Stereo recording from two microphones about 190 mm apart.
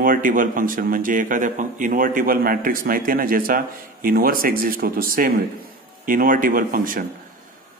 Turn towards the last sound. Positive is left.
turn(degrees=-45)  # may be behind; listen again after turning